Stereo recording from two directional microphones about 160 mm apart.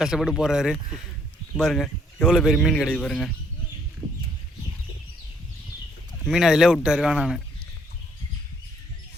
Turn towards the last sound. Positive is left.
turn(degrees=-5)  # may be behind; listen again after turning